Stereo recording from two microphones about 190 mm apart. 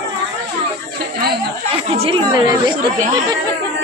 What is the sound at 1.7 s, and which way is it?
Speech, 30° right (ahead or behind).